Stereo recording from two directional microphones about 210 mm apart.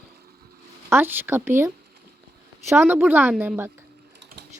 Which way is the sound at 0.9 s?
10° right (ahead or behind).